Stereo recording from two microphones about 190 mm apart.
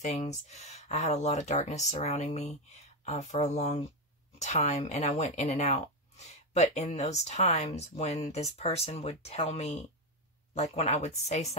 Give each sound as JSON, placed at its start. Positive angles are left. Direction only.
{"t": 0.0, "sound": "speech", "side_deg": 35}